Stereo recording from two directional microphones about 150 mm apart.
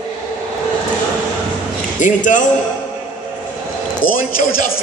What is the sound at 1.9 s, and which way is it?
Speech, 60° left (ahead or behind).